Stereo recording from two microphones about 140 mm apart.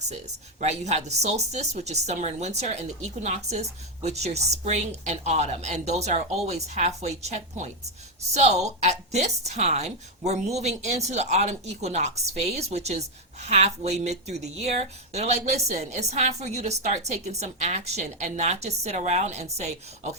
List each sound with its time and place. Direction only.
0.6 s a woman's voice: 50° right (ahead or behind)